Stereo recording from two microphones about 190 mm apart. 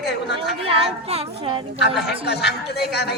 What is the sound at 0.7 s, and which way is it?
Speech, 30° right (ahead or behind).